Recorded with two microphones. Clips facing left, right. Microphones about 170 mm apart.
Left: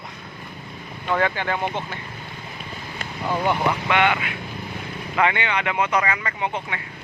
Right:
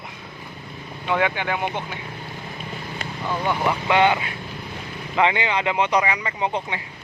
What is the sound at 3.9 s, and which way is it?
Speech, 25° right (ahead or behind).